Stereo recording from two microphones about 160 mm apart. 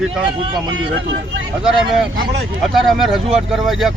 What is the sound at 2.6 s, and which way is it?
A man's voice, centre (ahead or behind).